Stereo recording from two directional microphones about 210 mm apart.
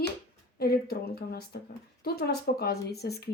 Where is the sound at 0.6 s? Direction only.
45° left (ahead or behind).